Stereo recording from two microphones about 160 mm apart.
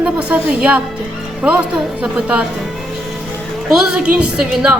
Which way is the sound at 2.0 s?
10° right (ahead or behind).